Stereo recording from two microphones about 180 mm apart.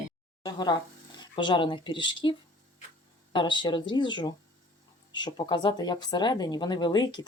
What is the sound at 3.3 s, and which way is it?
Speech, 25° left (ahead or behind).